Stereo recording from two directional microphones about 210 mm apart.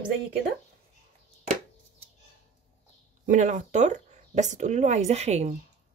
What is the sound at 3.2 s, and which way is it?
Speech, 35° right (ahead or behind).